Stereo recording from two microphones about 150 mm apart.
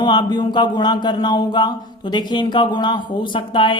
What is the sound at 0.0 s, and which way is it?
Speech, 30° left (ahead or behind).